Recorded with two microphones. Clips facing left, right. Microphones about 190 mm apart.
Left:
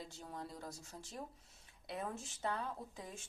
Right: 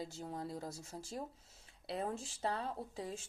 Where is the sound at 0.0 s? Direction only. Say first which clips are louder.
Right 5 dB; 25° right (ahead or behind).